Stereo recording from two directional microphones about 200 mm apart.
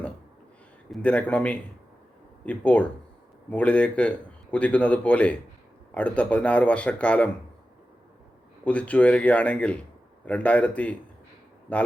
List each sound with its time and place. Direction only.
0.9 s a man's voice: 5° left (ahead or behind)
8.6 s a man's voice: 5° left (ahead or behind)